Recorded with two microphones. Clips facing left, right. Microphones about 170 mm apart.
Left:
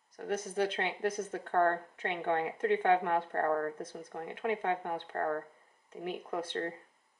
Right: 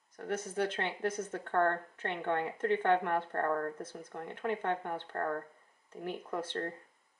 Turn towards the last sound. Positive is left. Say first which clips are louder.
# left 1 dB
turn(degrees=10)  # may be behind; listen again after turning